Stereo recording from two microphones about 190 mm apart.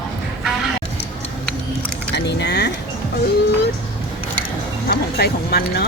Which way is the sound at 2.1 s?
65° left (ahead or behind).